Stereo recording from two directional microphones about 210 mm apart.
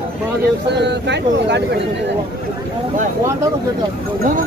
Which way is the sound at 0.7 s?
55° right (ahead or behind).